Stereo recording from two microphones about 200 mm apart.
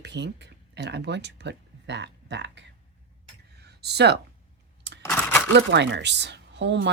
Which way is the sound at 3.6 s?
55° right (ahead or behind).